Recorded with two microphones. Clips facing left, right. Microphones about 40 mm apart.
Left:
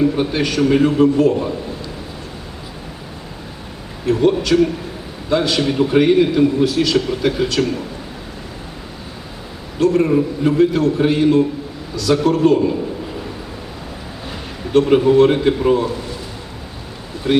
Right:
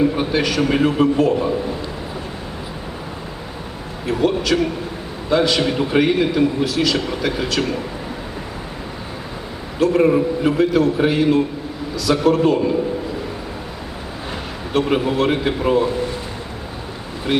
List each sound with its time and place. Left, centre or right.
0.2 s a man's voice: centre
4.0 s a man's voice: centre
9.8 s a man's voice: centre
14.7 s a man's voice: centre
17.3 s a man's voice: centre